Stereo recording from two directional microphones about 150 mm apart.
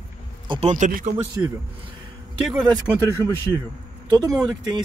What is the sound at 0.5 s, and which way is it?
Speech, 40° right (ahead or behind).